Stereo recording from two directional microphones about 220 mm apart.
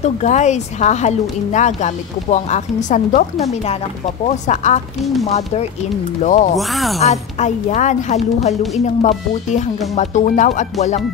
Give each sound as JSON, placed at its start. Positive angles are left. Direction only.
{"t": 0.0, "sound": "speech", "side_deg": 30}
{"t": 6.2, "sound": "speech", "side_deg": 35}
{"t": 6.5, "sound": "speech", "side_deg": 0}
{"t": 7.0, "sound": "speech", "side_deg": 30}